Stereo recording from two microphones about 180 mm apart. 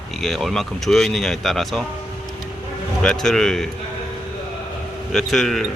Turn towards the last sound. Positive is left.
turn(degrees=0)  # may be behind; listen again after turning